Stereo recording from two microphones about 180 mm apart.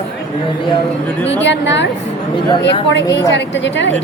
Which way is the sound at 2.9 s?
80° left.